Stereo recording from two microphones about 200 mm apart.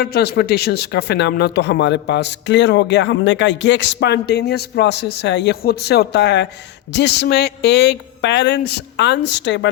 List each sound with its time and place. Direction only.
0.0 s speech: 50° left (ahead or behind)